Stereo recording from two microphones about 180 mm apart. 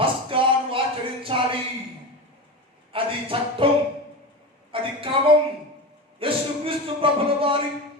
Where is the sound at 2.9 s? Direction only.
30° right (ahead or behind).